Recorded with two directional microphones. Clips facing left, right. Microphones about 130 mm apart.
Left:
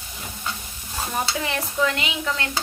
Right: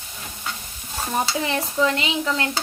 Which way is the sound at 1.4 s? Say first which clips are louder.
Right 1 dB; 30° right (ahead or behind).